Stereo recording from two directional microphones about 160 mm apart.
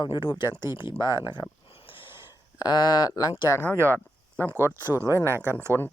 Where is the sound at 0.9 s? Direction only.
15° right (ahead or behind).